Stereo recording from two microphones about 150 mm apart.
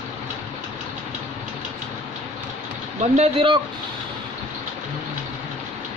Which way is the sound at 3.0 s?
50° right (ahead or behind).